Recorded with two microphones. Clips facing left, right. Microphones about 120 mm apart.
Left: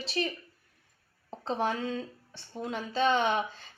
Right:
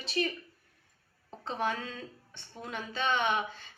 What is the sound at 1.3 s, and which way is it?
A woman's voice, 35° left (ahead or behind).